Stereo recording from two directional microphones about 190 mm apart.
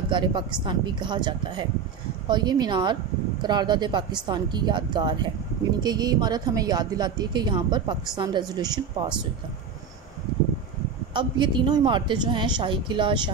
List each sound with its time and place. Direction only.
0.1 s speech: 25° right (ahead or behind)
11.1 s speech: 25° right (ahead or behind)